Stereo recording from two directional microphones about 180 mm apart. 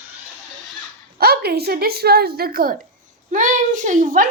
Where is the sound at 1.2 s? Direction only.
60° right (ahead or behind).